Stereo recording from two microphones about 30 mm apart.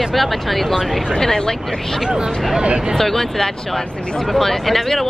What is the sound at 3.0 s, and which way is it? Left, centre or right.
Speech, centre.